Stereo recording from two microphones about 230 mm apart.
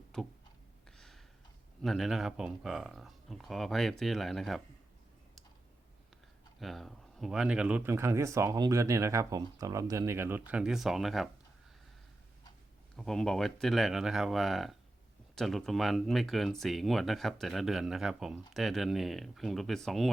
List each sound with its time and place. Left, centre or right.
0.1 s speech: centre
0.9 s a sound: centre
1.8 s speech: centre
6.6 s speech: centre
13.0 s speech: centre